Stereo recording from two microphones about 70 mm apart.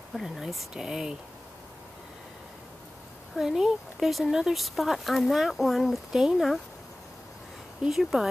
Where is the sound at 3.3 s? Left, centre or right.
Centre.